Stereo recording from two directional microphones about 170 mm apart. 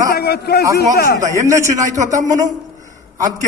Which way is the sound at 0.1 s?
70° left (ahead or behind).